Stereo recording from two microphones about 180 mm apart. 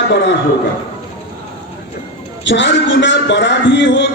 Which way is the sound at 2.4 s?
80° left.